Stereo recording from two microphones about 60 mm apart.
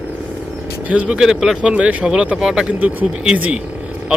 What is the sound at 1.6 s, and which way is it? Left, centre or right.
Speech, centre.